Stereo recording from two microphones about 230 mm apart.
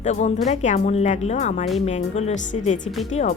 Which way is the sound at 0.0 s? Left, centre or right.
Left.